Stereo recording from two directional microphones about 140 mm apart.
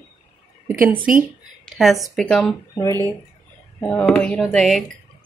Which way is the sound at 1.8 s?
Centre (ahead or behind).